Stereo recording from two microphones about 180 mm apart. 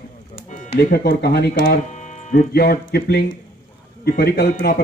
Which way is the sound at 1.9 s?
40° left (ahead or behind).